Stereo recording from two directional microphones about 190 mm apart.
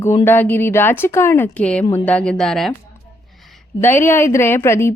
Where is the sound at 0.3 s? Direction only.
10° left (ahead or behind).